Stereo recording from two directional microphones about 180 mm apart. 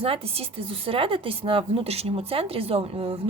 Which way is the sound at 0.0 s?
30° right (ahead or behind).